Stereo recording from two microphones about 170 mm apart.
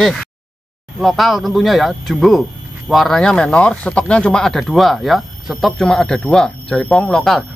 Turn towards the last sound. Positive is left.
turn(degrees=5)  # may be behind; listen again after turning